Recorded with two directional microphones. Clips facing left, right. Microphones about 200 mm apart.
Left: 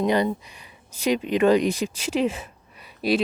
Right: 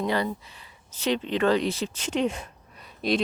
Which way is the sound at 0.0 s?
20° left (ahead or behind).